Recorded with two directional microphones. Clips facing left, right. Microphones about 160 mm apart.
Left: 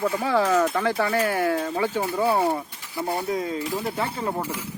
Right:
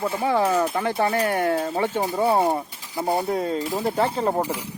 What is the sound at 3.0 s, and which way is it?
Speech, 45° right (ahead or behind).